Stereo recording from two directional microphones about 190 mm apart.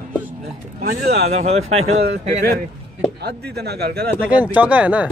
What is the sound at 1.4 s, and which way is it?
Speech, 35° right (ahead or behind).